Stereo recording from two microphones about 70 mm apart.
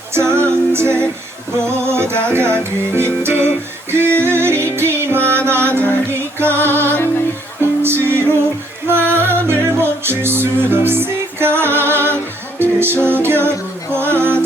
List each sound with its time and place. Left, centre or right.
0.1 s music: right